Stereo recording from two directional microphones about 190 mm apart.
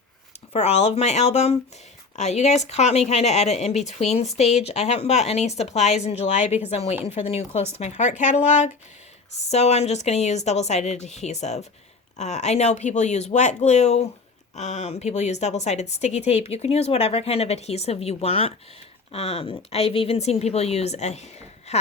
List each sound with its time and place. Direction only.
0.5 s a woman's voice: 35° left (ahead or behind)